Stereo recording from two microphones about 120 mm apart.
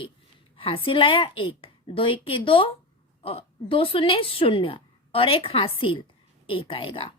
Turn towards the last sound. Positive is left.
turn(degrees=45)  # may be behind; listen again after turning